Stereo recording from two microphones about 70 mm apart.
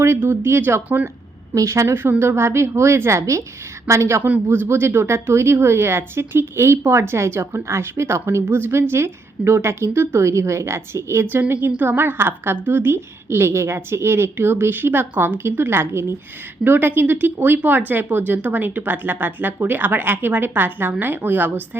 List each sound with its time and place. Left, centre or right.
0.2 s speech: right
1.5 s a woman's voice: right
1.9 s a woman's voice: right
4.2 s speech: right